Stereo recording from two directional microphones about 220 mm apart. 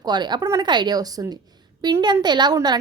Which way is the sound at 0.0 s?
20° right (ahead or behind).